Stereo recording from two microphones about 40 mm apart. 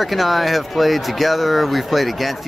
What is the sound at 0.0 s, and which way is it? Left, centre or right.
Speech, centre.